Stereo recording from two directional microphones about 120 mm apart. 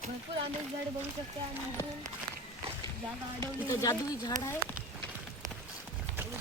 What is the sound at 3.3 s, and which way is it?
Speech, 25° left (ahead or behind).